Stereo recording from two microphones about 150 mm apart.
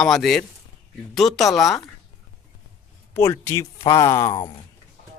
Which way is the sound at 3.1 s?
15° left (ahead or behind).